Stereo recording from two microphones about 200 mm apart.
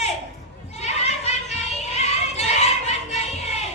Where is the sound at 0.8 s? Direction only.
35° left (ahead or behind).